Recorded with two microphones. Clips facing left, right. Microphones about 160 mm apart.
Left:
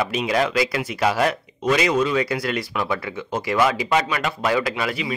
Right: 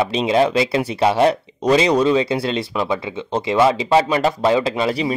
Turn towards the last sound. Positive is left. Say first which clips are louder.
# right 5 dB
turn(degrees=-30)  # may be behind; listen again after turning